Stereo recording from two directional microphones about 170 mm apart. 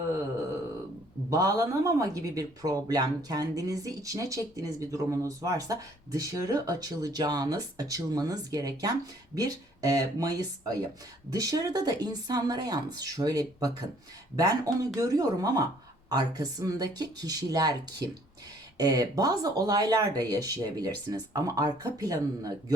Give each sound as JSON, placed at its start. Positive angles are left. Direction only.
{"t": 1.3, "sound": "speech", "side_deg": -20}
{"t": 18.8, "sound": "speech", "side_deg": -20}